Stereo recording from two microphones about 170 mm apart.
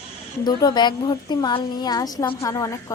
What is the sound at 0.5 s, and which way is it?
A woman's voice, 25° left (ahead or behind).